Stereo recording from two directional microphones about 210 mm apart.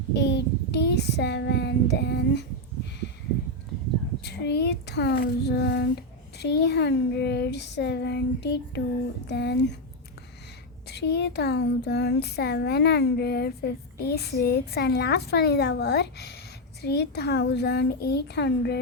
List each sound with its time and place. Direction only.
0.1 s child singing: 55° left (ahead or behind)
4.2 s speech: 50° left (ahead or behind)
10.8 s speech: 50° left (ahead or behind)